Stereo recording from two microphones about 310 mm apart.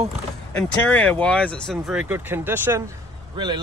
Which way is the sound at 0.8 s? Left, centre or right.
Centre.